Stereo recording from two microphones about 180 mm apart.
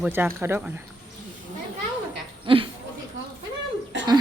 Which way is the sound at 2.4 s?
30° right (ahead or behind).